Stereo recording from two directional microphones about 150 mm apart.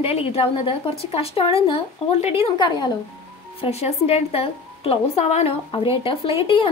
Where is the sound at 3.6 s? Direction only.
45° left (ahead or behind).